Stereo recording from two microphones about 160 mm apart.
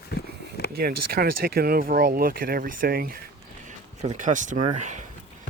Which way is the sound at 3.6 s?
50° right (ahead or behind).